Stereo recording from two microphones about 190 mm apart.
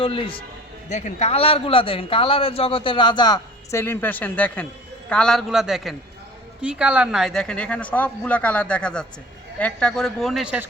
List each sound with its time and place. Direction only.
0.0 s a man's voice: 30° left (ahead or behind); by 10.7 s 5° right (ahead or behind)